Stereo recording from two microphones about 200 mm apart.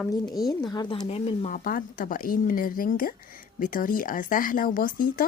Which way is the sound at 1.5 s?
45° left (ahead or behind).